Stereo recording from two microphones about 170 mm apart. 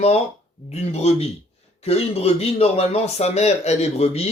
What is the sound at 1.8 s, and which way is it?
Speech, 35° left (ahead or behind).